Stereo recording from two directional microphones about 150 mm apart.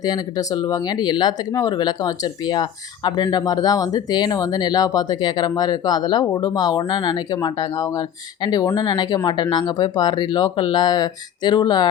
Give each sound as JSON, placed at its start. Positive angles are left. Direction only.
{"t": 0.0, "sound": "speech", "side_deg": 25}